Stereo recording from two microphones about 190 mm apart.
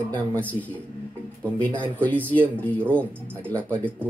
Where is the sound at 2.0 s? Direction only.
10° left (ahead or behind).